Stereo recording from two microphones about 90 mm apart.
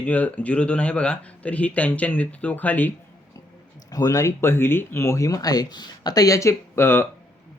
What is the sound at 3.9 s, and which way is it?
Speech, 40° left (ahead or behind).